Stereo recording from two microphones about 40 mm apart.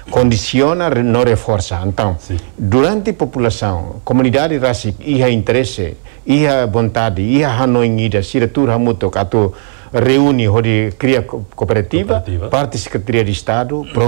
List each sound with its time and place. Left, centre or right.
0.3 s speech: left